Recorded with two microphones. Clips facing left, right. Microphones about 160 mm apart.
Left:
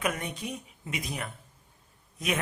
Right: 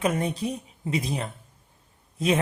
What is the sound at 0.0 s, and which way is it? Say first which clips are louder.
Speech: right 7 dB; 30° right (ahead or behind).